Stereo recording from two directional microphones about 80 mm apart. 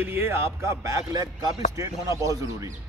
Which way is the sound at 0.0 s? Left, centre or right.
Right.